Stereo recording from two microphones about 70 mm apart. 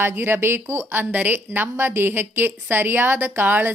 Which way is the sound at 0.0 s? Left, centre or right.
Right.